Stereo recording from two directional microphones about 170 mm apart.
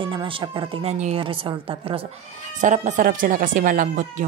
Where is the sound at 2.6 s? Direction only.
45° right (ahead or behind).